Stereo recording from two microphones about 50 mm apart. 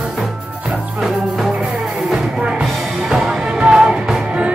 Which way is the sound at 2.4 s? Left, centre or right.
Centre.